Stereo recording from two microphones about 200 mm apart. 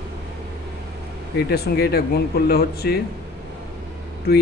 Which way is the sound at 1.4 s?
55° left (ahead or behind).